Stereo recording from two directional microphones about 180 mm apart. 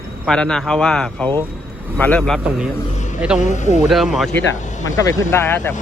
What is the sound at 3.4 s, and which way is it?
Speech, 40° left (ahead or behind).